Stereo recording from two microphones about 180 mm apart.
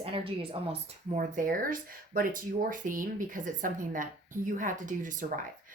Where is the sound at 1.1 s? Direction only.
45° right (ahead or behind).